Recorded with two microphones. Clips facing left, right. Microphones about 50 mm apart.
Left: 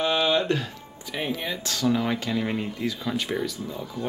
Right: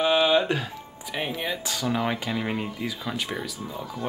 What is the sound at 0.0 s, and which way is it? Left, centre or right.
Speech, centre.